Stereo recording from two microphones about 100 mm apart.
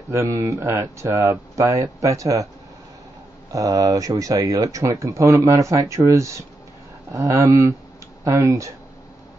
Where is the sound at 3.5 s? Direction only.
35° right (ahead or behind).